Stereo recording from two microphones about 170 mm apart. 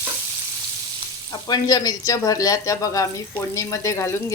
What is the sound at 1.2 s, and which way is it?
Speech, 25° left (ahead or behind).